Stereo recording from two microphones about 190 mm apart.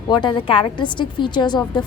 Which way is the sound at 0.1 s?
25° left (ahead or behind).